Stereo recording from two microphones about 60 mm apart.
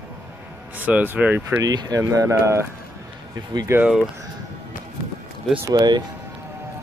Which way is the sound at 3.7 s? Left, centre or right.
Right.